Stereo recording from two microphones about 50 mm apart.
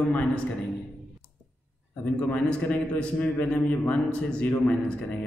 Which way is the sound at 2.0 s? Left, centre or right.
Left.